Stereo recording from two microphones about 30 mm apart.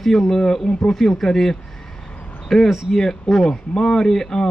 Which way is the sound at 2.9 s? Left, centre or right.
Centre.